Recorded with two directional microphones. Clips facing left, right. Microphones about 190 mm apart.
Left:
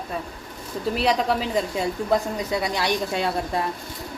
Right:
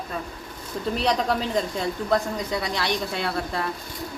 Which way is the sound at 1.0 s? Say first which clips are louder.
Left 2 dB; 5° left (ahead or behind).